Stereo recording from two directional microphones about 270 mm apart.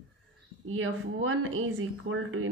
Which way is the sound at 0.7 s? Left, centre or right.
Right.